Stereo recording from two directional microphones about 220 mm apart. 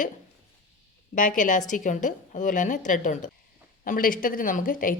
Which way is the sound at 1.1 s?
35° left (ahead or behind).